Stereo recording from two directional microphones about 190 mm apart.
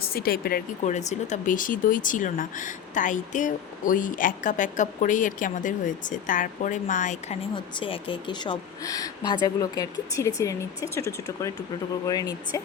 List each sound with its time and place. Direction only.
0.1 s speech: 50° left (ahead or behind)
7.5 s speech: 25° left (ahead or behind)